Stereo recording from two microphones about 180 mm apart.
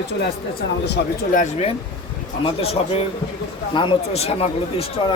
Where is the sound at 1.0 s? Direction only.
65° left (ahead or behind).